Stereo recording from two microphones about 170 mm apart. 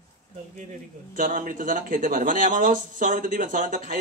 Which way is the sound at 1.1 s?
55° right (ahead or behind).